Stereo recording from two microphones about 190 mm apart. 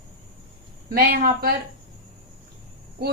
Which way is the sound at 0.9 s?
50° right (ahead or behind).